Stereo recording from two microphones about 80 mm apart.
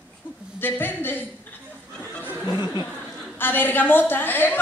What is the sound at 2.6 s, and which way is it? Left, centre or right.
Speech, left.